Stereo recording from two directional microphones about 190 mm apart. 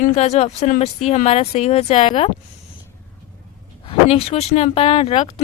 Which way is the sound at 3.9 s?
30° left (ahead or behind).